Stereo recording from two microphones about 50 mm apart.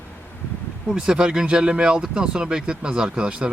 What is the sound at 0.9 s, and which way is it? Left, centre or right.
Speech, centre.